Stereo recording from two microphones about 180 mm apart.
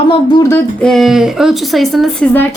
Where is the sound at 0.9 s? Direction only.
Centre (ahead or behind).